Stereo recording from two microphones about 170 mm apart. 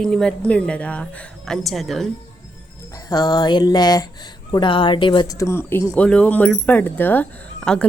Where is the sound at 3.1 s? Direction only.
25° left (ahead or behind).